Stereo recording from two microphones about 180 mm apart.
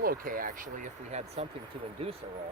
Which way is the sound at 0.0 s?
55° right (ahead or behind).